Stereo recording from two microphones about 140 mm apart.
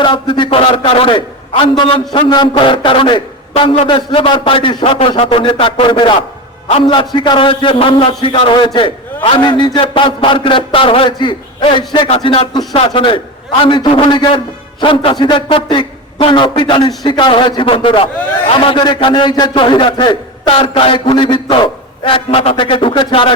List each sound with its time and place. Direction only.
0.0 s a man's voice: 35° left (ahead or behind)